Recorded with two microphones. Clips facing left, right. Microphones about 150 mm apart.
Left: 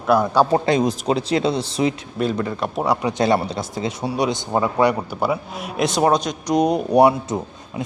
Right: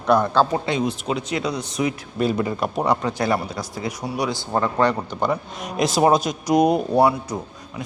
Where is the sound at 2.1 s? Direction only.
5° right (ahead or behind).